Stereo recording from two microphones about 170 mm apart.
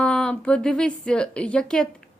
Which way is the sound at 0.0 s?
5° left (ahead or behind).